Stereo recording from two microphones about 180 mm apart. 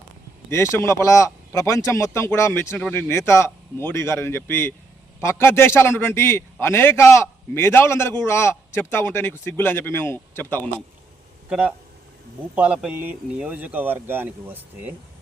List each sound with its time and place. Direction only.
0.5 s a man's voice: 15° left (ahead or behind)
11.4 s a man's voice: 5° right (ahead or behind)